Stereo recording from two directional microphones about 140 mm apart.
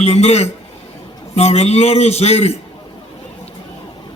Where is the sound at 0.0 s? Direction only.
45° left (ahead or behind).